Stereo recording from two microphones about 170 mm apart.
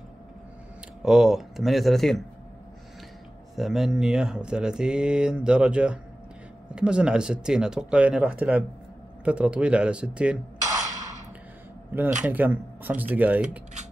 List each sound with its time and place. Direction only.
1.0 s speech: centre (ahead or behind)
3.5 s speech: centre (ahead or behind)
12.2 s speech: 10° right (ahead or behind)